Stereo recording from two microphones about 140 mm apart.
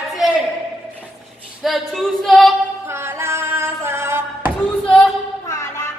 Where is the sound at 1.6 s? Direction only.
Centre (ahead or behind).